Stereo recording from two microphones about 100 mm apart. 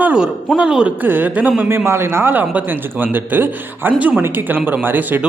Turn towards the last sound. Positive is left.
turn(degrees=-15)  # may be behind; listen again after turning